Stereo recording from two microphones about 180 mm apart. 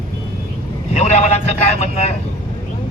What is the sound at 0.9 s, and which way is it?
A man's voice, 40° left (ahead or behind).